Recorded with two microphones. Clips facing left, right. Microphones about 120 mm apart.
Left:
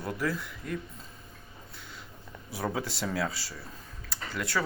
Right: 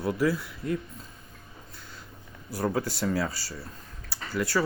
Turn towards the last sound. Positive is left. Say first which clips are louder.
# right 4 dB
turn(degrees=-5)  # may be behind; listen again after turning